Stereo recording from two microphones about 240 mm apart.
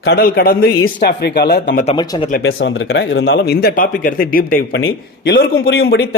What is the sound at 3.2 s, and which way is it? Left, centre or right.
A man's voice, left.